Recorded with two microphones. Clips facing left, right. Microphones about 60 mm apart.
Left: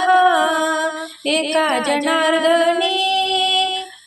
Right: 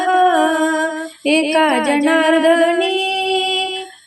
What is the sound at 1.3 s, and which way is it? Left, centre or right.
Music, right.